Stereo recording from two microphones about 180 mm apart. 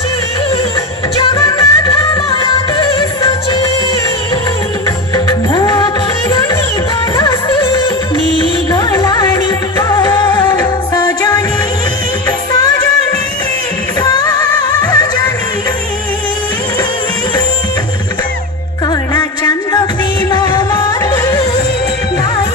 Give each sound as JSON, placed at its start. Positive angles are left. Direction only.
{"t": 1.2, "sound": "music", "side_deg": 20}
{"t": 5.1, "sound": "music", "side_deg": 20}
{"t": 7.2, "sound": "music of bollywood", "side_deg": 25}
{"t": 8.7, "sound": "music", "side_deg": 20}
{"t": 14.0, "sound": "music", "side_deg": 20}
{"t": 19.1, "sound": "music", "side_deg": 20}